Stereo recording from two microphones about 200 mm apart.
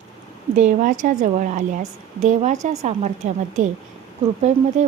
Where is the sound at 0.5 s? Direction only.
40° right (ahead or behind).